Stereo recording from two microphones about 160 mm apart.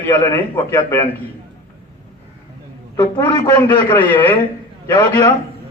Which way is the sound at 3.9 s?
10° left (ahead or behind).